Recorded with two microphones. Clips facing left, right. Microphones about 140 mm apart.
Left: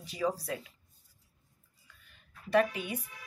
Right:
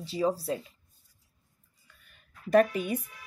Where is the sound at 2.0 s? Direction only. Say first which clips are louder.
Right 6 dB; 45° right (ahead or behind).